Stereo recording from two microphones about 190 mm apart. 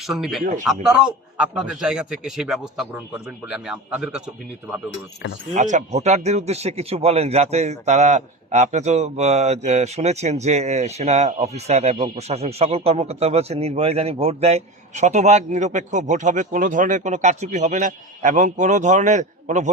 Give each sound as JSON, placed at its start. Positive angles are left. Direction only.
{"t": 0.0, "sound": "a man's voice", "side_deg": 0}
{"t": 5.5, "sound": "speech", "side_deg": -40}